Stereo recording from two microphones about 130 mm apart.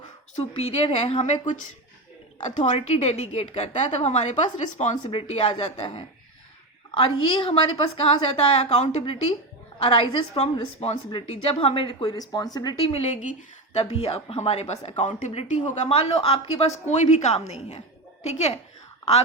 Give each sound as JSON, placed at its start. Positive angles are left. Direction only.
{"t": 0.9, "sound": "speech", "side_deg": 50}
{"t": 5.1, "sound": "a woman's voice", "side_deg": 45}
{"t": 6.9, "sound": "a woman's voice", "side_deg": 40}
{"t": 9.7, "sound": "speech", "side_deg": 40}
{"t": 10.3, "sound": "speech", "side_deg": 55}
{"t": 12.8, "sound": "a woman's voice", "side_deg": 50}